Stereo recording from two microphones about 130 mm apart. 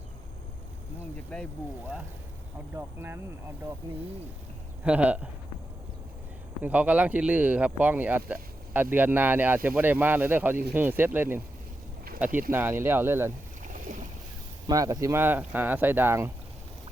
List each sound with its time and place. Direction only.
1.3 s speech: 5° left (ahead or behind)
2.7 s speech: 15° right (ahead or behind)
4.8 s speech: 10° right (ahead or behind)
6.6 s speech: 10° right (ahead or behind)
12.5 s speech: 15° right (ahead or behind)
13.7 s boat: 85° right
14.7 s speech: 25° right (ahead or behind)